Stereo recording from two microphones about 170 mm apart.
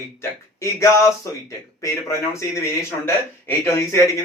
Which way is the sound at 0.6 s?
15° left (ahead or behind).